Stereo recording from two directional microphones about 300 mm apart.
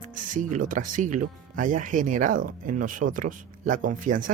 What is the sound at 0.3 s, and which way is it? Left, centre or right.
Speech, right.